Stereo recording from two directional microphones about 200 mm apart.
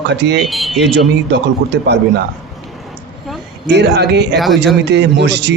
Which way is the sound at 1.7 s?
60° right (ahead or behind).